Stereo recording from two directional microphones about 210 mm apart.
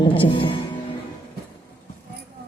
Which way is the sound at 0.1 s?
25° left (ahead or behind).